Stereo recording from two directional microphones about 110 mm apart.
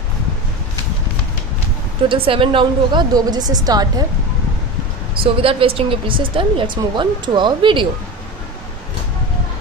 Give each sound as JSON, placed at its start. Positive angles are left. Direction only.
{"t": 2.0, "sound": "speech", "side_deg": -55}
{"t": 5.2, "sound": "speech", "side_deg": -55}